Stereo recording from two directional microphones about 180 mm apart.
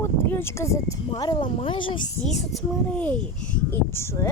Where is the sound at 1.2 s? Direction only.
25° left (ahead or behind).